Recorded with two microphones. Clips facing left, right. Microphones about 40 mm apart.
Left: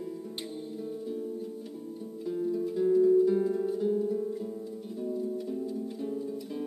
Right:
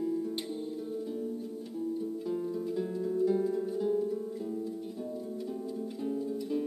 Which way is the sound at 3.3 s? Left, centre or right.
Centre.